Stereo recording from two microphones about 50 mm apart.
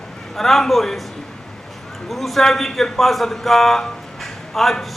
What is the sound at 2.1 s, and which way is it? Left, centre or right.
A man's voice, centre.